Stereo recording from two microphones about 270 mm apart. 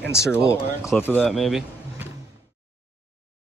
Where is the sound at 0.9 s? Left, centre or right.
Centre.